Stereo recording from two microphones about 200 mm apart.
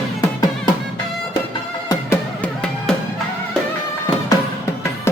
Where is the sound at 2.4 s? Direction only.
5° left (ahead or behind).